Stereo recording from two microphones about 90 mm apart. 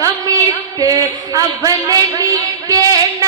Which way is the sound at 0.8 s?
45° right (ahead or behind).